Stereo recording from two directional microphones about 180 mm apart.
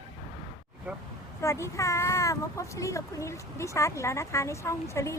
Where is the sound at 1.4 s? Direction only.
15° left (ahead or behind).